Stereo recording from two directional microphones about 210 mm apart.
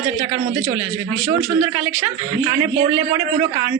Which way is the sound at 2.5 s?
15° right (ahead or behind).